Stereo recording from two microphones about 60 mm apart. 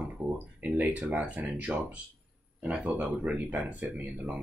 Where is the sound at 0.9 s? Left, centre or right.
Right.